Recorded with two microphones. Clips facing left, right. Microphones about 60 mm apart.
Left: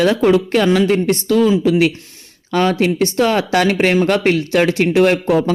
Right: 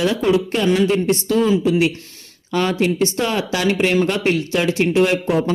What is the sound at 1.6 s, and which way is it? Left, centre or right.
Speech, left.